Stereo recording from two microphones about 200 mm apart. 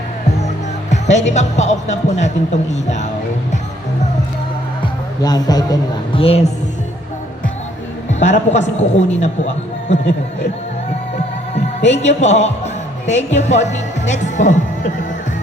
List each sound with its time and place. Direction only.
0.9 s music: 35° left (ahead or behind)
1.3 s a woman's voice: 35° left (ahead or behind)
4.8 s music: 20° left (ahead or behind)
6.1 s a woman's voice: 30° left (ahead or behind)
8.2 s a woman's voice: 35° left (ahead or behind)
11.9 s a woman's voice: 35° left (ahead or behind)